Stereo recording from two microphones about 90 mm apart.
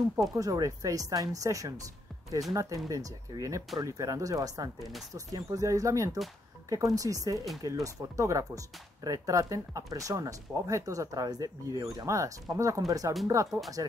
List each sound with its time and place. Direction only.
0.2 s speech: 40° right (ahead or behind)